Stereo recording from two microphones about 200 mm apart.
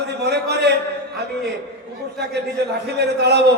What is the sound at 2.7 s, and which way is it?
Speech, 55° right (ahead or behind).